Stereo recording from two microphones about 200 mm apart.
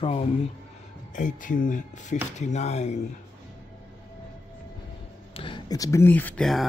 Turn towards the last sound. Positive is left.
turn(degrees=5)  # may be behind; listen again after turning